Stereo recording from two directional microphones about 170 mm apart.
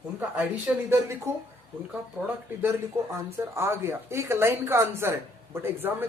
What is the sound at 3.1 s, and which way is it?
A woman's voice, 15° right (ahead or behind).